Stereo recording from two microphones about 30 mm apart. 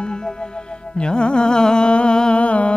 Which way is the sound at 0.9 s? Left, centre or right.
Left.